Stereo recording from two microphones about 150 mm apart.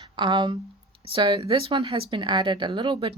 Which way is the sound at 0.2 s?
30° right (ahead or behind).